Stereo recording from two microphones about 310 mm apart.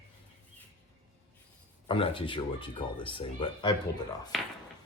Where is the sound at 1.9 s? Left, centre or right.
Centre.